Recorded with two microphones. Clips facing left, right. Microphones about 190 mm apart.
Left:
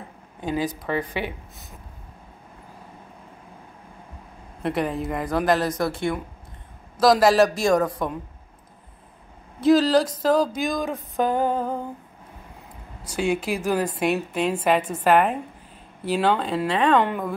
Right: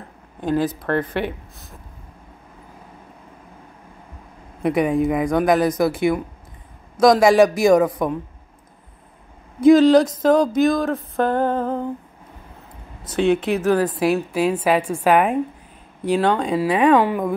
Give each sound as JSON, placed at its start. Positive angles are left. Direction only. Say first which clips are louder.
{"t": 0.4, "sound": "speech", "louder": "right 5 dB", "side_deg": 10}
{"t": 4.6, "sound": "speech", "louder": "right 7 dB", "side_deg": 0}
{"t": 9.6, "sound": "speech", "louder": "right 6 dB", "side_deg": 5}
{"t": 13.2, "sound": "a woman's voice", "louder": "right 6 dB", "side_deg": 5}